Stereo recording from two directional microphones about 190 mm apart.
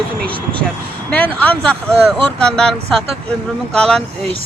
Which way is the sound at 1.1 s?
5° left (ahead or behind).